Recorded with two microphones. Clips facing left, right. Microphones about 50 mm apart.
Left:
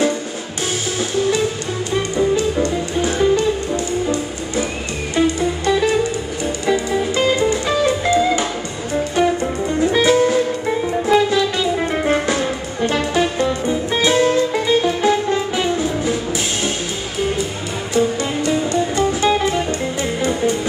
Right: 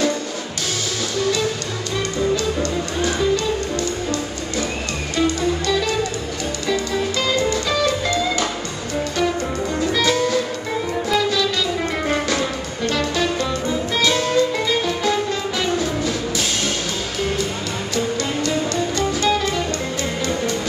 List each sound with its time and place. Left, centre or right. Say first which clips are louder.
1.1 s music: left 3 dB; left
17.9 s music: left 5 dB; centre